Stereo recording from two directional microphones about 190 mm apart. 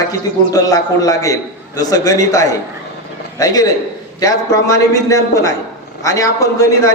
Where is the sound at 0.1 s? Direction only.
20° left (ahead or behind).